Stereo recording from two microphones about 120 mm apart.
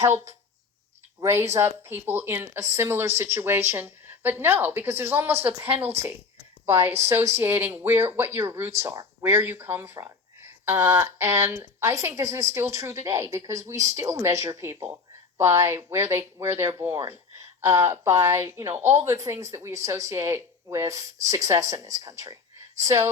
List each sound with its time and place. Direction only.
1.2 s speech: 20° right (ahead or behind)